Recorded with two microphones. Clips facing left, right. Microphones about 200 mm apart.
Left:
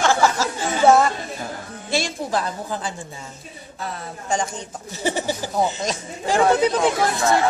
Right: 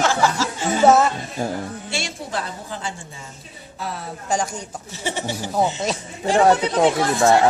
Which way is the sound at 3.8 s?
5° right (ahead or behind).